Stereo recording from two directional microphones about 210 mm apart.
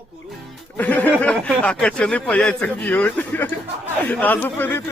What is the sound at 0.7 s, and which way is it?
A man's voice, 10° left (ahead or behind).